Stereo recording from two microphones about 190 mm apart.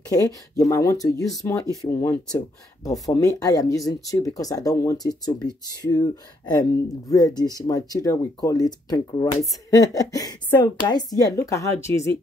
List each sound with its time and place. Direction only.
0.1 s speech: 20° left (ahead or behind)